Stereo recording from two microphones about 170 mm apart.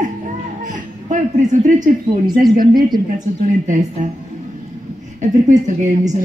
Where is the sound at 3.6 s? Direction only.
50° right (ahead or behind).